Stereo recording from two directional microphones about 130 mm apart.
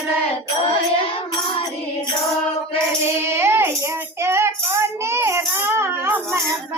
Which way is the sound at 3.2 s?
20° right (ahead or behind).